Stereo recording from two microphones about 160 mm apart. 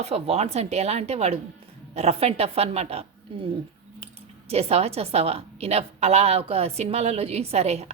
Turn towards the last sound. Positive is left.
turn(degrees=-40)  # may be behind; listen again after turning